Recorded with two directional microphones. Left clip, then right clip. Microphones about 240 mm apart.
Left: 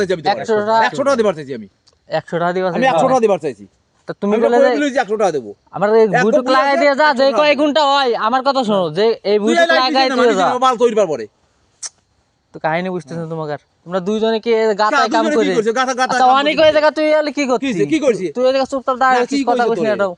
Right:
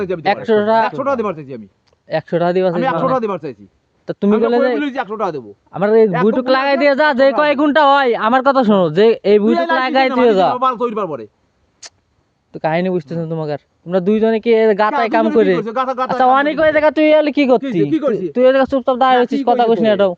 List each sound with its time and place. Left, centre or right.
0.2 s a man's voice: right
0.9 s speech: centre
2.0 s a man's voice: right
2.8 s a man's voice: centre
4.0 s a man's voice: right
9.5 s a man's voice: centre
10.5 s a man's voice: centre
11.8 s a sound: right
12.6 s a man's voice: right
15.6 s a man's voice: centre
16.9 s a man's voice: right
17.6 s a man's voice: centre
18.3 s a man's voice: right